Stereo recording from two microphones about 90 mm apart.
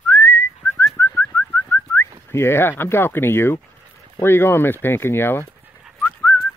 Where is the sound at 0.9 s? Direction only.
30° left (ahead or behind).